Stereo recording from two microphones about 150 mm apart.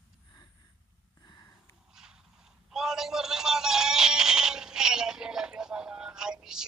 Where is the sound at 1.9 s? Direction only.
5° right (ahead or behind).